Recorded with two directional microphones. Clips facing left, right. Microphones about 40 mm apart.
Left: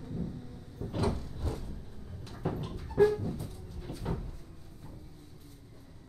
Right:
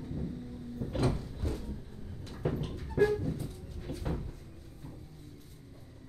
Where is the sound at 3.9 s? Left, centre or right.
Right.